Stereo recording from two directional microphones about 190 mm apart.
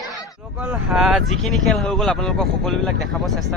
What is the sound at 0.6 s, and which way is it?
Speech, 5° right (ahead or behind).